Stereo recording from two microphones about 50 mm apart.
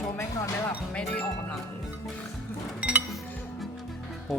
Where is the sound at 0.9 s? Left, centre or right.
Left.